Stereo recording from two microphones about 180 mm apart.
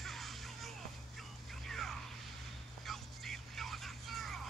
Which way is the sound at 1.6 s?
Centre (ahead or behind).